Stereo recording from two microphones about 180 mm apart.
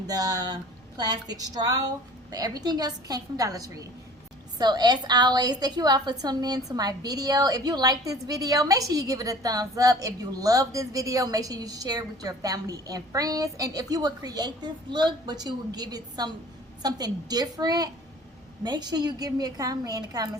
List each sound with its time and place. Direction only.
0.1 s a woman's voice: 20° right (ahead or behind)